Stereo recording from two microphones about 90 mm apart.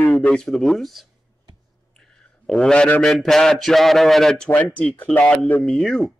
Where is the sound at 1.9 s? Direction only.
10° left (ahead or behind).